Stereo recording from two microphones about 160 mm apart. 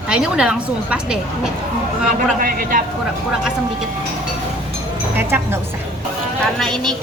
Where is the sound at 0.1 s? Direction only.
5° right (ahead or behind).